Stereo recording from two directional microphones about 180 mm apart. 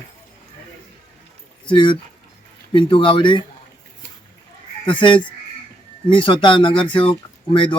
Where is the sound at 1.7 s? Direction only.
25° left (ahead or behind).